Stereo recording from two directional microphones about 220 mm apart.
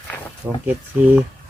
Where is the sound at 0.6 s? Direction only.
10° right (ahead or behind).